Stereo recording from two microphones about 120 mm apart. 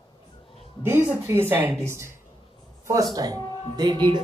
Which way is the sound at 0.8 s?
20° right (ahead or behind).